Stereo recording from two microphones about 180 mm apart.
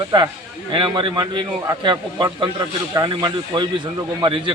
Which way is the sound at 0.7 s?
30° right (ahead or behind).